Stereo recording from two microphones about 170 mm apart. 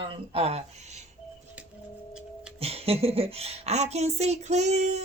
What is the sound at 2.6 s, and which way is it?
Speech, 35° right (ahead or behind).